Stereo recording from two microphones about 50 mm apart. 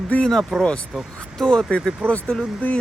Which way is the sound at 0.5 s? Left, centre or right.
Centre.